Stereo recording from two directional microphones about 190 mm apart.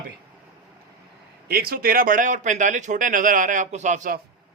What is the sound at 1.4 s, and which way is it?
A man's voice, 55° right (ahead or behind).